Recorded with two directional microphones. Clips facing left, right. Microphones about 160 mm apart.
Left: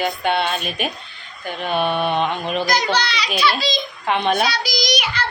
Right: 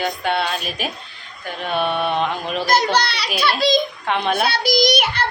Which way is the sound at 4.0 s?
Centre (ahead or behind).